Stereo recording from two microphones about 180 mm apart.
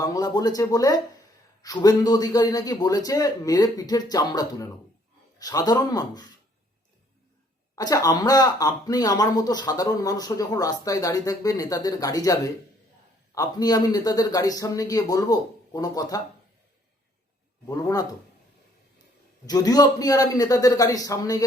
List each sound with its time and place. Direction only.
0.0 s speech: 20° left (ahead or behind)
7.8 s speech: 20° left (ahead or behind)
17.7 s speech: 20° left (ahead or behind)
19.5 s speech: 20° left (ahead or behind)